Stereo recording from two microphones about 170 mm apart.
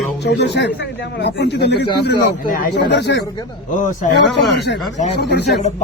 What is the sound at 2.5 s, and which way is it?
Speech, 50° left (ahead or behind).